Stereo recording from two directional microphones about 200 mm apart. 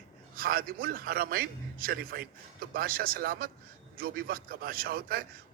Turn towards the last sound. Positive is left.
turn(degrees=-45)  # may be behind; listen again after turning